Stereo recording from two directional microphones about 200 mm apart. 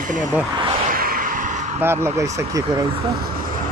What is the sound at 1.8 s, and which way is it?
Speech, 10° right (ahead or behind).